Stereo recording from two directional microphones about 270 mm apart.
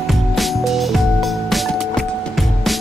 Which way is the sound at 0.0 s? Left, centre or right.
Centre.